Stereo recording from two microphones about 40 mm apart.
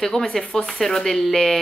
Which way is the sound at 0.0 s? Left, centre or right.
Centre.